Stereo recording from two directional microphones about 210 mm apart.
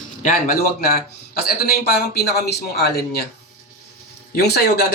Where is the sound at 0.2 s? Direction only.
40° left (ahead or behind).